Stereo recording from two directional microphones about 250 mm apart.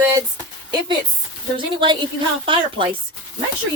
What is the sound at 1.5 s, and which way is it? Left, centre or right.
Speech, centre.